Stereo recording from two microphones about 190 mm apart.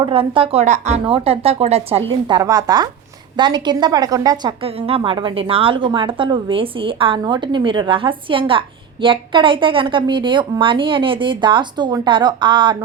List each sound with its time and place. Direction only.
0.0 s a woman's voice: 30° right (ahead or behind)
4.6 s a woman's voice: 30° right (ahead or behind)